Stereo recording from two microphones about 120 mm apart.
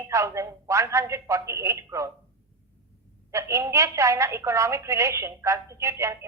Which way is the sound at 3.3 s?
25° right (ahead or behind).